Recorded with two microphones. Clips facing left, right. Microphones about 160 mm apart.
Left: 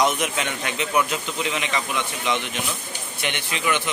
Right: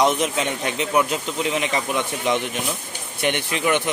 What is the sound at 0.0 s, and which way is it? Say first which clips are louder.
Speech: right 3 dB; 30° right (ahead or behind).